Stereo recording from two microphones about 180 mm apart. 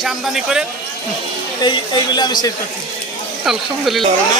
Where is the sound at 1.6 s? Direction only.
25° left (ahead or behind).